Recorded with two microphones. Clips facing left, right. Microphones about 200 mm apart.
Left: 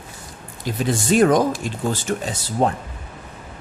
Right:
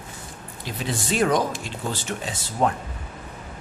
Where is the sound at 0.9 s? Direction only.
45° left (ahead or behind).